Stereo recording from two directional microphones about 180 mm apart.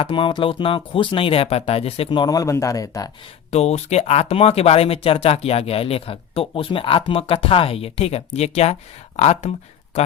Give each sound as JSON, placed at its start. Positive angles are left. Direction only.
{"t": 0.0, "sound": "speech", "side_deg": 25}
{"t": 3.5, "sound": "speech", "side_deg": 35}